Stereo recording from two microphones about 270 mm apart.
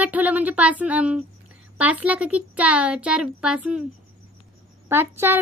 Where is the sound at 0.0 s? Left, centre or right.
Centre.